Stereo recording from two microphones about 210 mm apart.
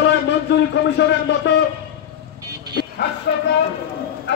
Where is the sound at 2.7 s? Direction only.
50° left (ahead or behind).